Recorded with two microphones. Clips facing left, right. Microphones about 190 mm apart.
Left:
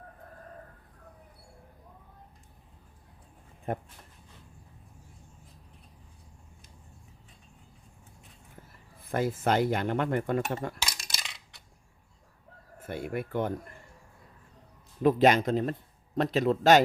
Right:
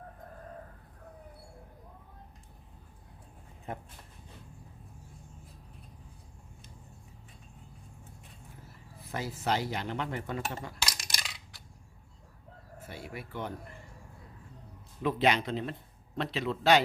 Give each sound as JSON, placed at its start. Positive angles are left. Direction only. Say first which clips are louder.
{"t": 3.7, "sound": "speech", "louder": "left 7 dB", "side_deg": 55}
{"t": 9.0, "sound": "speech", "louder": "left 8 dB", "side_deg": 50}
{"t": 10.8, "sound": "coin", "louder": "even", "side_deg": 0}
{"t": 12.8, "sound": "speech", "louder": "left 9 dB", "side_deg": 55}
{"t": 15.0, "sound": "speech", "louder": "left 6 dB", "side_deg": 45}